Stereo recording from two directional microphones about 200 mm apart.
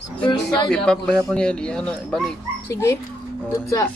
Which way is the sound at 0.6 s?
5° left (ahead or behind).